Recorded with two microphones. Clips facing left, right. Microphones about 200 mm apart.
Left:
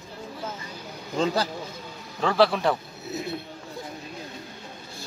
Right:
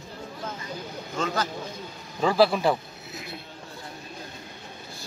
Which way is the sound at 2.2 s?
5° right (ahead or behind).